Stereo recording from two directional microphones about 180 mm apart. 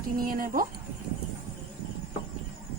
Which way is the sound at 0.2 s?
50° right (ahead or behind).